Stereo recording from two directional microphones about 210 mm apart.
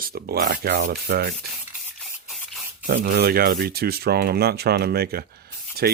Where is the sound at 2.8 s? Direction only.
45° right (ahead or behind).